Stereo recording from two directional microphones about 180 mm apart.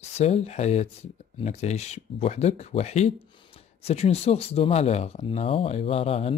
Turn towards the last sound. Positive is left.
turn(degrees=35)  # may be behind; listen again after turning